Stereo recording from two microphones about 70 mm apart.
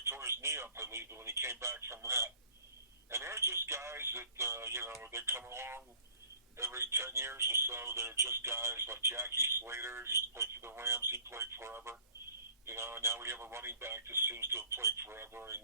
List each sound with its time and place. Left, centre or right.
0.0 s speech: right